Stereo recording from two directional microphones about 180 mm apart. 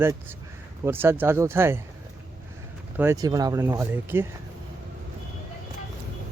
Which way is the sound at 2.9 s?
15° right (ahead or behind).